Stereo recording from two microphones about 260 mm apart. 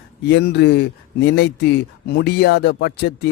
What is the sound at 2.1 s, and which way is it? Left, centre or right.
Speech, left.